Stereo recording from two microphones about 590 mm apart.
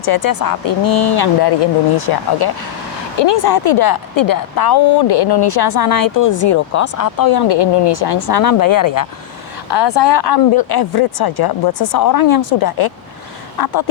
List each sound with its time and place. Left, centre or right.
0.0 s speech: left